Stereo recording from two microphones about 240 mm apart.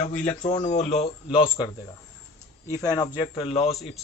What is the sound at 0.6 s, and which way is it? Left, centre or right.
Speech, left.